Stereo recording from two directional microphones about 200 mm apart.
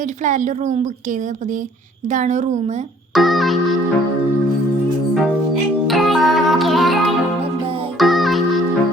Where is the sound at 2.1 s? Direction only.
35° right (ahead or behind).